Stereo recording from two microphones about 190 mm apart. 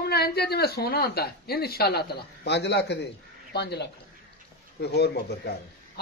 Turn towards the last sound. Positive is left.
turn(degrees=60)  # may be behind; listen again after turning